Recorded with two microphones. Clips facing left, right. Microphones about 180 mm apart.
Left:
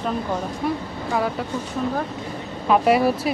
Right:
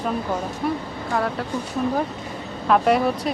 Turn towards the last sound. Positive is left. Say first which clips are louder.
# left 1 dB
turn(degrees=5)  # may be behind; listen again after turning